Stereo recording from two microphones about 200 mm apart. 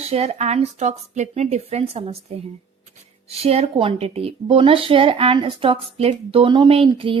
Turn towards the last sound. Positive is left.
turn(degrees=-25)  # may be behind; listen again after turning